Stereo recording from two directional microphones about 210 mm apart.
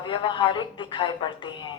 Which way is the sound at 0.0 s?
20° left (ahead or behind).